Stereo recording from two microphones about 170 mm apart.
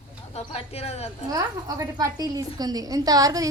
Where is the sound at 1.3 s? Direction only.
20° right (ahead or behind).